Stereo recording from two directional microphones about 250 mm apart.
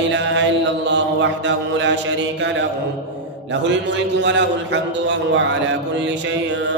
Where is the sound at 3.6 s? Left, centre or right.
Right.